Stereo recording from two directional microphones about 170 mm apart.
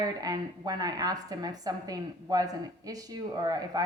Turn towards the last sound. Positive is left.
turn(degrees=-20)  # may be behind; listen again after turning